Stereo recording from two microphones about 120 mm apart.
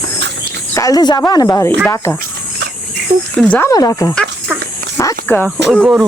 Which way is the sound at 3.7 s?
30° left (ahead or behind).